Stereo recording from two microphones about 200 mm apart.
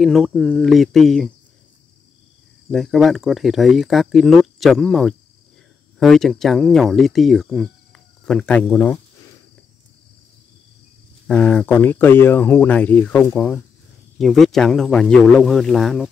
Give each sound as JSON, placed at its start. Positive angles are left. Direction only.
{"t": 0.0, "sound": "speech", "side_deg": 0}
{"t": 2.7, "sound": "speech", "side_deg": 0}
{"t": 11.2, "sound": "speech", "side_deg": 5}